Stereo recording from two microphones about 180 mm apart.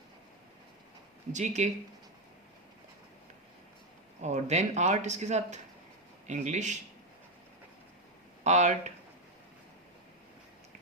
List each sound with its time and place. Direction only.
1.3 s speech: 40° right (ahead or behind)
4.2 s speech: 40° right (ahead or behind)
8.4 s speech: 40° right (ahead or behind)